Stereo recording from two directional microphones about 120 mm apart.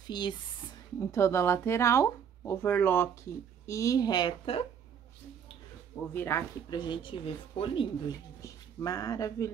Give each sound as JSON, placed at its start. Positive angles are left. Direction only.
{"t": 0.0, "sound": "speech", "side_deg": 40}
{"t": 0.9, "sound": "speech", "side_deg": 25}
{"t": 5.9, "sound": "speech", "side_deg": 20}
{"t": 6.7, "sound": "speech", "side_deg": 40}
{"t": 8.1, "sound": "speech", "side_deg": 30}